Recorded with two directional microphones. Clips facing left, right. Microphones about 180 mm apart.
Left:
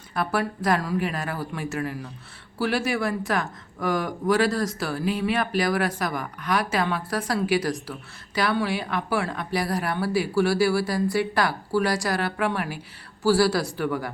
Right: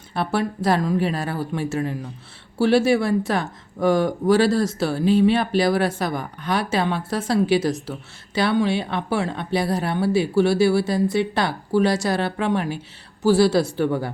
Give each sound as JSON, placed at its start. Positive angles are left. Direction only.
{"t": 0.1, "sound": "speech", "side_deg": -25}